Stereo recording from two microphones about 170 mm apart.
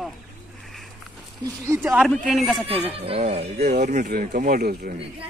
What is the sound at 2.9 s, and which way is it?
Speech, 35° right (ahead or behind).